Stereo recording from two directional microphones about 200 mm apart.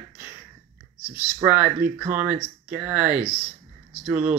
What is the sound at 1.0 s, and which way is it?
Speech, 10° right (ahead or behind).